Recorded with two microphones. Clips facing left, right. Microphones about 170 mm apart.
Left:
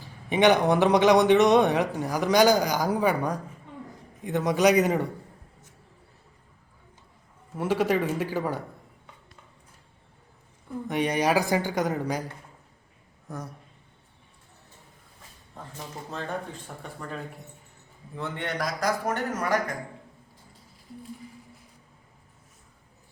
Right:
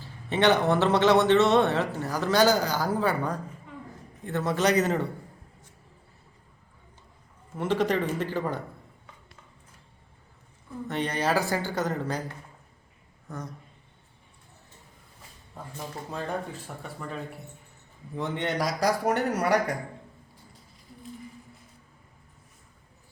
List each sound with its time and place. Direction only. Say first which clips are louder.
0.0 s a man's voice: left 2 dB; 15° left (ahead or behind)
7.5 s a man's voice: left 1 dB; 10° left (ahead or behind)
10.8 s a man's voice: left 3 dB; 15° left (ahead or behind)
13.2 s speech: left 1 dB; 10° left (ahead or behind)
15.6 s speech: right 2 dB; 10° right (ahead or behind)
18.2 s a man's voice: right 3 dB; 20° right (ahead or behind)